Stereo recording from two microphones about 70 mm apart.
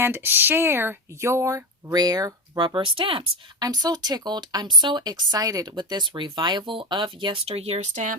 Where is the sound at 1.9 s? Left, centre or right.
Right.